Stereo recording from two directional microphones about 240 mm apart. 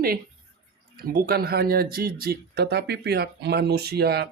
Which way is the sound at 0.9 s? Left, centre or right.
Right.